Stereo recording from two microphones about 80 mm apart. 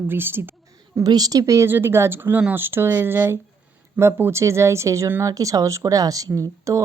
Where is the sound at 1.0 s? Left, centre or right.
Right.